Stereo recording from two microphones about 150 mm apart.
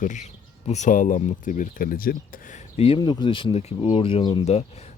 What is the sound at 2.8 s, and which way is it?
Speech, 35° left (ahead or behind).